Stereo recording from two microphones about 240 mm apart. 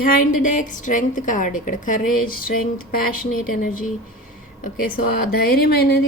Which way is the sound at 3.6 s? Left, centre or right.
Left.